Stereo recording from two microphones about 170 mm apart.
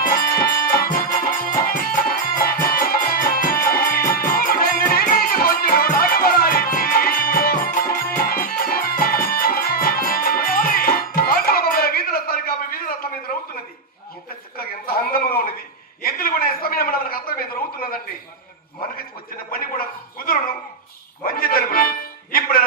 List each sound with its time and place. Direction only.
0.0 s music: 60° left (ahead or behind)
14.6 s a sound: 60° left (ahead or behind)
19.5 s gargling: 60° left (ahead or behind)
21.3 s music: 60° left (ahead or behind)